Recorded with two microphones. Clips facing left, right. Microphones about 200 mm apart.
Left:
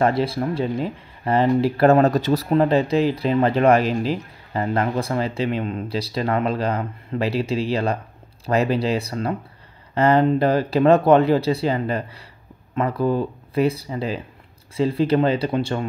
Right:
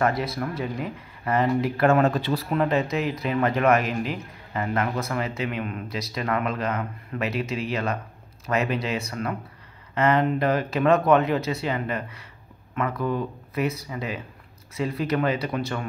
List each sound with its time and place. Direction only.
0.0 s speech: 30° left (ahead or behind)